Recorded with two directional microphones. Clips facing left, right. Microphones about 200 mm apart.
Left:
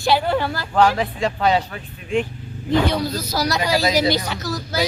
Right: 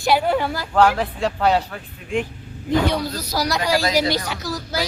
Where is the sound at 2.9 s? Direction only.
5° left (ahead or behind).